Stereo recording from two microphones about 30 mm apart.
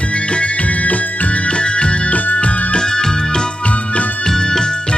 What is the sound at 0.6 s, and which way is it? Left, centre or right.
Music, left.